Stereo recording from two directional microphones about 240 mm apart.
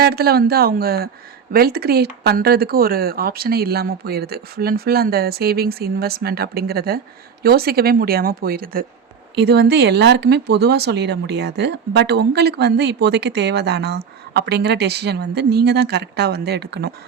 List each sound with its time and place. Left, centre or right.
0.0 s speech: right